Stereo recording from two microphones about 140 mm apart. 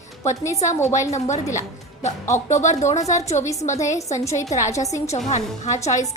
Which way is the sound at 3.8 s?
25° left (ahead or behind).